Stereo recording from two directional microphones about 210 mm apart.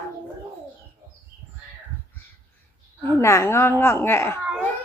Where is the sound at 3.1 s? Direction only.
15° left (ahead or behind).